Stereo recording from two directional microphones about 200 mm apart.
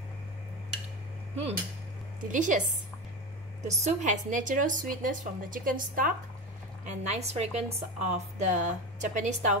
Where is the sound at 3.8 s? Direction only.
35° right (ahead or behind).